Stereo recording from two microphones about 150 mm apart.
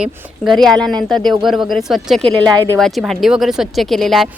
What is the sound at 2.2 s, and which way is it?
Speech, 30° right (ahead or behind).